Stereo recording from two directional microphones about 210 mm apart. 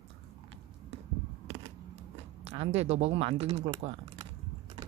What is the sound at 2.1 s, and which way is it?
Speech, 30° right (ahead or behind).